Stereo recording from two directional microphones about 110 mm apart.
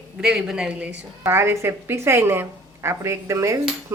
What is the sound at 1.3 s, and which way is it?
A woman's voice, 25° right (ahead or behind).